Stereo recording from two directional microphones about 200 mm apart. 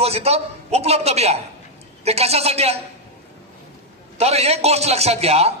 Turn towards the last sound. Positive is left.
turn(degrees=-30)  # may be behind; listen again after turning